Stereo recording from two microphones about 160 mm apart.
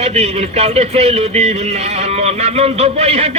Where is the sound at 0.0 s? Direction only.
40° right (ahead or behind).